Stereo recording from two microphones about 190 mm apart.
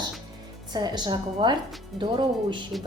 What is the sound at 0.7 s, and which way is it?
Speech, 20° right (ahead or behind).